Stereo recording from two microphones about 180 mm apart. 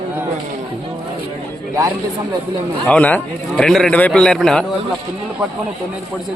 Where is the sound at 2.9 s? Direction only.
10° left (ahead or behind).